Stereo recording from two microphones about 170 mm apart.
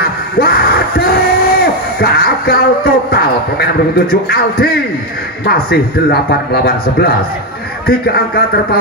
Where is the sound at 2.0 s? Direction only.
65° left (ahead or behind).